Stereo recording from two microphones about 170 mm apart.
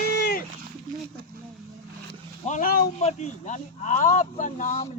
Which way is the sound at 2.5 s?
50° left (ahead or behind).